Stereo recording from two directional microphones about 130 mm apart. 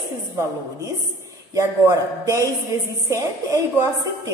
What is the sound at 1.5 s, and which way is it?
A woman's voice, 25° right (ahead or behind).